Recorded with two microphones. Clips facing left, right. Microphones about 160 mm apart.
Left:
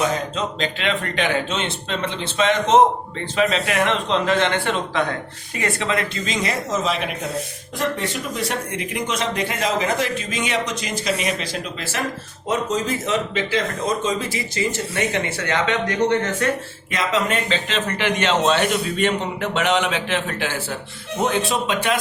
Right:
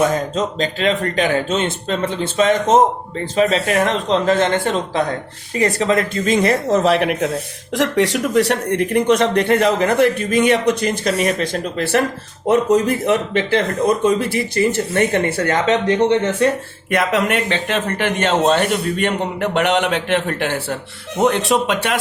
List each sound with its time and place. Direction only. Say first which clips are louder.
0.0 s speech: right 5 dB; 45° right (ahead or behind); by 7.3 s 70° right (ahead or behind)
7.8 s speech: right 8 dB; 85° right; by 16.0 s 40° right (ahead or behind)
16.4 s speech: right 6 dB; 30° right (ahead or behind)
16.9 s speech: right 4 dB; 60° right (ahead or behind)